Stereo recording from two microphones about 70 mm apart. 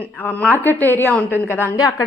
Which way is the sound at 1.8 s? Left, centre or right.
Left.